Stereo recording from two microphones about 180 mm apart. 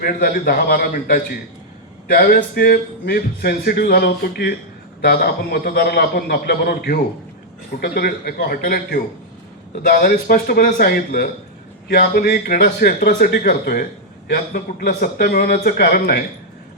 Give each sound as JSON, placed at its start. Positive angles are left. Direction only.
{"t": 0.0, "sound": "speech", "side_deg": 55}
{"t": 14.3, "sound": "speech", "side_deg": 65}